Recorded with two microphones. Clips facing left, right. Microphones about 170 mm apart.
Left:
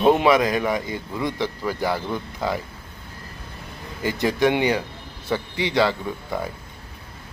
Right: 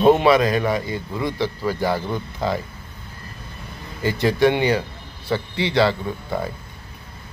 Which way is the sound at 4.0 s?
15° left (ahead or behind).